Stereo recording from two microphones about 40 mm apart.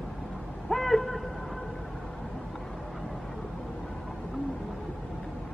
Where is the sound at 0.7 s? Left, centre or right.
Centre.